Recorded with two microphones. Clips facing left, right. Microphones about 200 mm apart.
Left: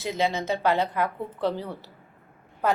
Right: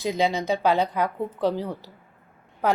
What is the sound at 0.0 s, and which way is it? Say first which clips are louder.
A woman's voice: right 3 dB; 15° right (ahead or behind).